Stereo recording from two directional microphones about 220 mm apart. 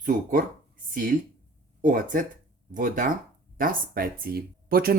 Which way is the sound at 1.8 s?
35° right (ahead or behind).